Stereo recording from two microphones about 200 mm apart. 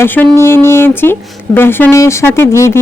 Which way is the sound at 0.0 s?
10° left (ahead or behind).